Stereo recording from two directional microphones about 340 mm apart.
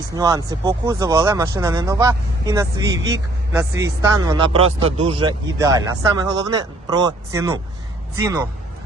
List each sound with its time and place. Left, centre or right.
0.1 s speech: centre